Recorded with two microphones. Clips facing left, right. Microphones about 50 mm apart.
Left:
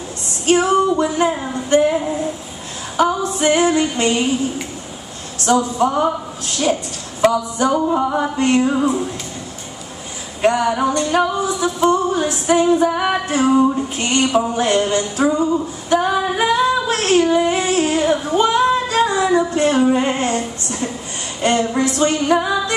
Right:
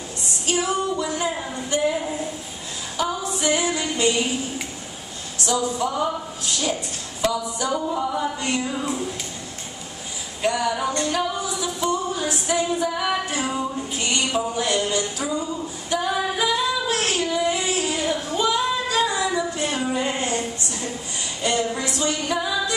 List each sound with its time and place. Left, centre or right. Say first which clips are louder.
0.5 s music: left 9 dB; left
1.5 s a sound: left 8 dB; left
3.0 s female singing: left 8 dB; left
5.4 s a woman's voice: left 7 dB; left
7.5 s music: left 8 dB; left
8.7 s speech: left 9 dB; left
10.4 s a sound: left 7 dB; left
18.4 s female singing: left 6 dB; left
21.4 s music: left 7 dB; left